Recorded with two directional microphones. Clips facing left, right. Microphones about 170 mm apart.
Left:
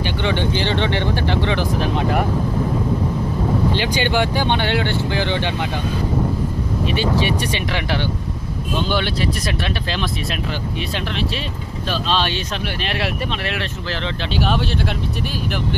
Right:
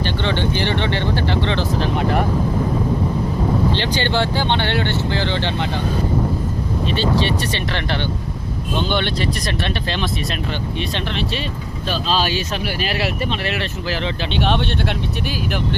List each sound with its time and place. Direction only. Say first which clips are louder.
0.0 s speech: even; 15° left (ahead or behind)
3.8 s speech: left 1 dB; 10° left (ahead or behind)
6.8 s speech: even; 10° left (ahead or behind)